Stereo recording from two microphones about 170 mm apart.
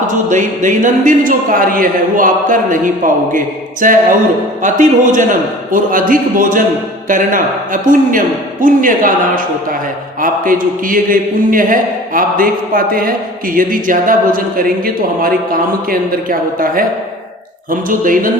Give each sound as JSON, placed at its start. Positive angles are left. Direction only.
{"t": 0.1, "sound": "speech", "side_deg": -50}